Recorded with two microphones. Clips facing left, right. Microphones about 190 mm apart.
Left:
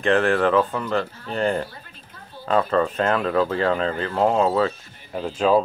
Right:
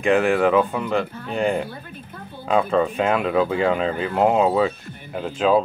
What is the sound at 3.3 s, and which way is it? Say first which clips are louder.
Speech: right 1 dB; 5° right (ahead or behind).